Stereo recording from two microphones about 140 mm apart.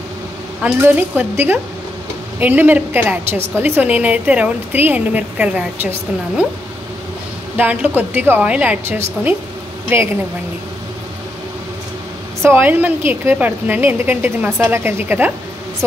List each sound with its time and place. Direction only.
0.8 s a woman's voice: 15° right (ahead or behind)
7.5 s a woman's voice: 15° right (ahead or behind)
12.4 s a woman's voice: 15° right (ahead or behind)